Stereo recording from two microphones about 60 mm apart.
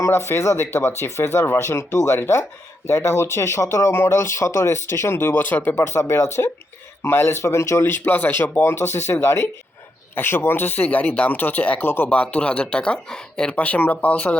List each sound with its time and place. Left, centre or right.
0.0 s speech: left
2.8 s speech: left
5.7 s speech: left
7.9 s speech: left
10.2 s speech: left